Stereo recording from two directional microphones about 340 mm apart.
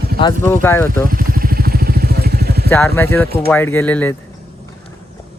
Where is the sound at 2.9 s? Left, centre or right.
Centre.